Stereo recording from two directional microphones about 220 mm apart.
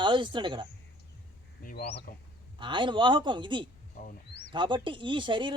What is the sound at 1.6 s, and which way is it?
Speech, 50° left (ahead or behind).